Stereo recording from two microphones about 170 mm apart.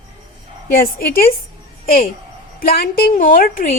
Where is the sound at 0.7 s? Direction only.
60° left (ahead or behind).